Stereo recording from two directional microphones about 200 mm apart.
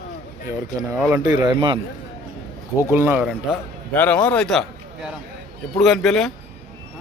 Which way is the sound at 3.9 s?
10° left (ahead or behind).